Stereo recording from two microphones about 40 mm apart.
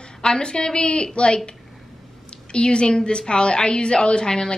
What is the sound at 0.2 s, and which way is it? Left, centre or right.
A woman's voice, left.